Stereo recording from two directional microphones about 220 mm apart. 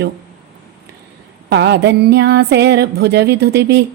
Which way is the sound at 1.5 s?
50° right (ahead or behind).